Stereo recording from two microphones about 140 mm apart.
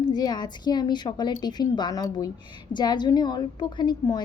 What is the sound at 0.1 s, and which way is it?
A woman's voice, 30° left (ahead or behind).